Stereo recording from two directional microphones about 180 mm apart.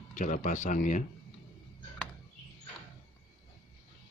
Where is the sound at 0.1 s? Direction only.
45° left (ahead or behind).